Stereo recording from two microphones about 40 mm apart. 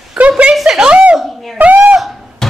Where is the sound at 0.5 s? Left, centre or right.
Centre.